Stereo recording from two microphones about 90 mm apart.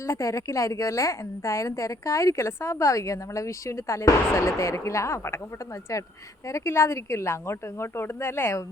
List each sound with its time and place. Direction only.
0.0 s a woman's voice: 35° left (ahead or behind)